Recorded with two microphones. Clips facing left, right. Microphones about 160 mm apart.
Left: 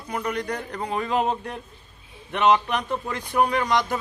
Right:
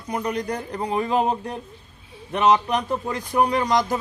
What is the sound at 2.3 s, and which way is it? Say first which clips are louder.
Speech: right 1 dB; 35° right (ahead or behind).